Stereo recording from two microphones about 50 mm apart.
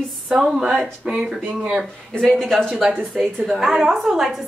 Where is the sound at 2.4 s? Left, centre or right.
Centre.